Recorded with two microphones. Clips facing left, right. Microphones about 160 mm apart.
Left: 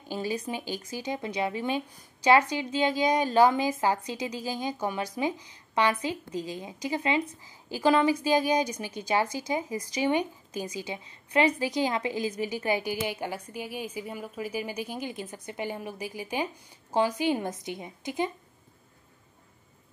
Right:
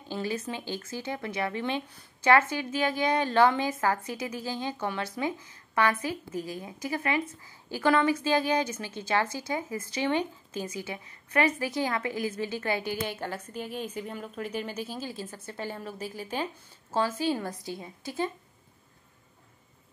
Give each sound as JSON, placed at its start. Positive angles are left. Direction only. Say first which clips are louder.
{"t": 0.1, "sound": "a woman's voice", "louder": "left 1 dB", "side_deg": 15}